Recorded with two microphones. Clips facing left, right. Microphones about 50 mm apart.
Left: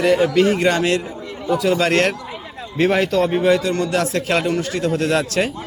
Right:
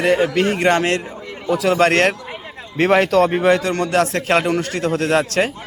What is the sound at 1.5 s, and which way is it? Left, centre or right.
A man's voice, right.